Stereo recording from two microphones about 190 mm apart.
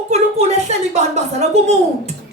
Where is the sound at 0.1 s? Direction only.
35° right (ahead or behind).